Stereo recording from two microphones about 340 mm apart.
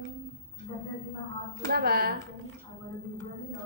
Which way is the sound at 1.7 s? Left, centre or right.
Right.